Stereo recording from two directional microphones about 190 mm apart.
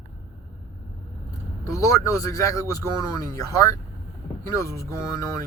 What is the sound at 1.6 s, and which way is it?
Speech, 15° left (ahead or behind).